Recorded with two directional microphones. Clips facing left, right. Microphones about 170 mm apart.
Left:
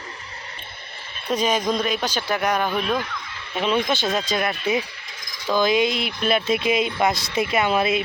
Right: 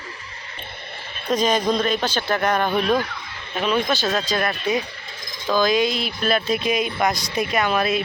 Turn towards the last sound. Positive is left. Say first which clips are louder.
# even
turn(degrees=20)  # may be behind; listen again after turning